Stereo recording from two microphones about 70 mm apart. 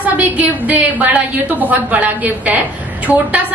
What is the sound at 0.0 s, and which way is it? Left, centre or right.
A woman's voice, right.